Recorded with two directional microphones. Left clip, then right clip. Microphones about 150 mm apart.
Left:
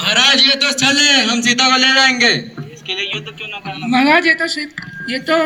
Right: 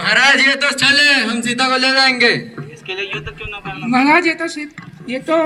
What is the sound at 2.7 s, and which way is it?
A man's voice, 90° left.